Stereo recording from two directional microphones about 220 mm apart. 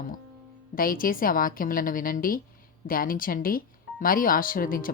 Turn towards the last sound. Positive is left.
turn(degrees=40)  # may be behind; listen again after turning